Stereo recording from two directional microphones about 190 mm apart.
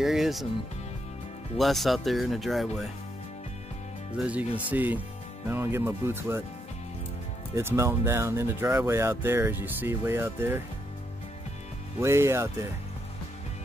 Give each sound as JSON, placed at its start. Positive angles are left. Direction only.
{"t": 0.0, "sound": "speech", "side_deg": 0}
{"t": 1.6, "sound": "speech", "side_deg": 0}
{"t": 4.2, "sound": "speech", "side_deg": -10}
{"t": 7.5, "sound": "speech", "side_deg": -15}
{"t": 12.0, "sound": "speech", "side_deg": -15}